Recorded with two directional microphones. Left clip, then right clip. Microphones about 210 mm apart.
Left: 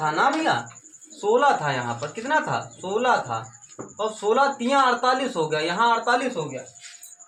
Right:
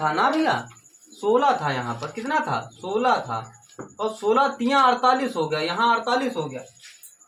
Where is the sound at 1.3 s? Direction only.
15° right (ahead or behind).